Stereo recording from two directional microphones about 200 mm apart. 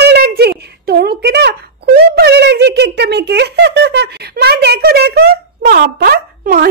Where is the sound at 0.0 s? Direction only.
55° right (ahead or behind).